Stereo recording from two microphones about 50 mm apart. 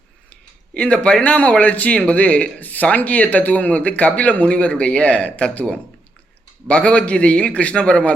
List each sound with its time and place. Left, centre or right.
0.7 s speech: left